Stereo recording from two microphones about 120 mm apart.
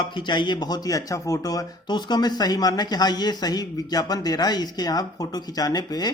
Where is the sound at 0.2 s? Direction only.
40° left (ahead or behind).